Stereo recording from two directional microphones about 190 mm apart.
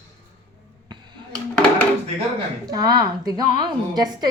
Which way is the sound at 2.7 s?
20° right (ahead or behind).